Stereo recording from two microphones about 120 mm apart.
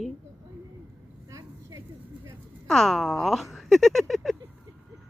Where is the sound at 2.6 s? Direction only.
5° left (ahead or behind).